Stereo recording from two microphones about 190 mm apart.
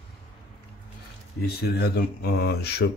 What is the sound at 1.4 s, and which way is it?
Speech, 55° left (ahead or behind).